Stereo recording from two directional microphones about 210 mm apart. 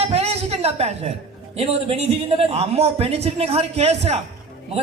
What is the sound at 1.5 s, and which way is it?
Speech, 30° right (ahead or behind).